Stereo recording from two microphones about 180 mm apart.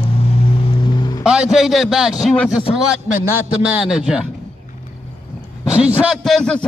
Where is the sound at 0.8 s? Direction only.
25° left (ahead or behind).